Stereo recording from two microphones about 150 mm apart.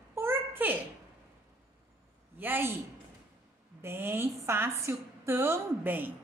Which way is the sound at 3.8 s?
15° right (ahead or behind).